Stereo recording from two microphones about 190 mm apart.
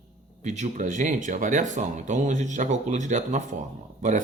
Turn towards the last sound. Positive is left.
turn(degrees=-40)  # may be behind; listen again after turning